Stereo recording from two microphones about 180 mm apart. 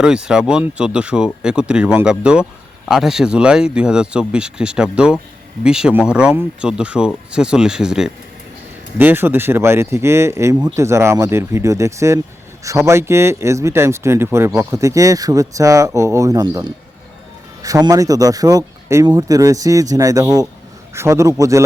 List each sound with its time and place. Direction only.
0.0 s a man's voice: 5° right (ahead or behind)